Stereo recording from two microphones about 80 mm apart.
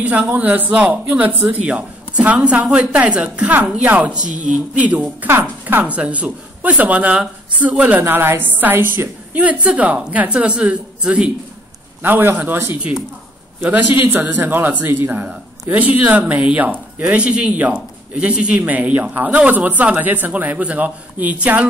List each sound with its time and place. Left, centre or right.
0.0 s a woman's voice: centre
8.0 s a woman's voice: right; by 11.3 s centre
12.0 s a woman's voice: right